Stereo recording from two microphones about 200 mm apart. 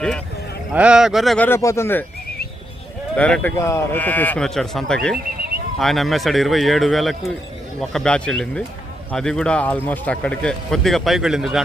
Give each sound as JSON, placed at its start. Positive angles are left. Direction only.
{"t": 0.7, "sound": "speech", "side_deg": -5}
{"t": 1.5, "sound": "speech", "side_deg": 15}
{"t": 3.2, "sound": "speech", "side_deg": 5}